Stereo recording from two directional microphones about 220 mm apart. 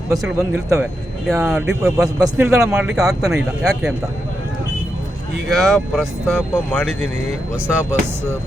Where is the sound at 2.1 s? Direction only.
15° right (ahead or behind).